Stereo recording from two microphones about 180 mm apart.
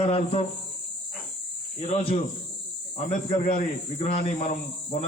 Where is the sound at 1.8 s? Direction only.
35° left (ahead or behind).